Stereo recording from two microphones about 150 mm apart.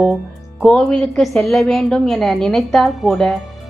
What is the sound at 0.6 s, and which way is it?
Speech, 5° left (ahead or behind).